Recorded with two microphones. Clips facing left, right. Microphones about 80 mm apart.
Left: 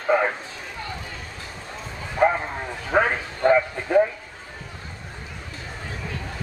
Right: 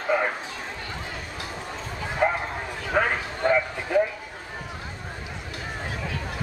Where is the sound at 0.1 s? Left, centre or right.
Left.